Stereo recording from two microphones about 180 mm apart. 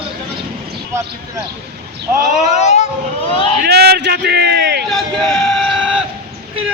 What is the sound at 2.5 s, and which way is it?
Speech, 40° left (ahead or behind).